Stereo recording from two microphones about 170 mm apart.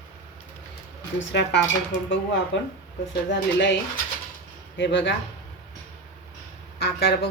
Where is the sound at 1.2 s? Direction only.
90° left.